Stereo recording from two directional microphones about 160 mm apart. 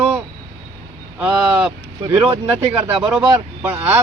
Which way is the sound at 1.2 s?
5° right (ahead or behind).